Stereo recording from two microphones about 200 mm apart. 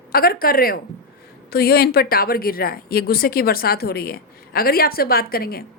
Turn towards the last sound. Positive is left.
turn(degrees=50)  # may be behind; listen again after turning